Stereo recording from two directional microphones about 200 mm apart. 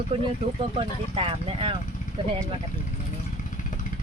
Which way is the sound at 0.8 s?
25° right (ahead or behind).